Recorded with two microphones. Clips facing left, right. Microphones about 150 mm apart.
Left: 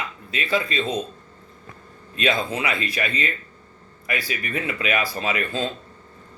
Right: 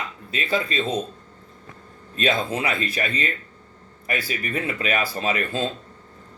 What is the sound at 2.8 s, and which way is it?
Speech, 35° right (ahead or behind).